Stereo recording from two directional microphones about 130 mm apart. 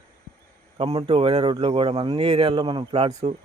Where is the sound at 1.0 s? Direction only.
35° right (ahead or behind).